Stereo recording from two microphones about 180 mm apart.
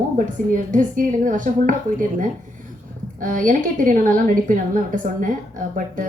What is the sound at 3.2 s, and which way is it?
A woman's voice, 45° right (ahead or behind).